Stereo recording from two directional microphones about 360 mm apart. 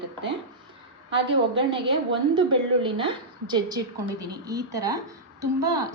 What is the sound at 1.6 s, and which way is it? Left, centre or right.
A woman's voice, centre.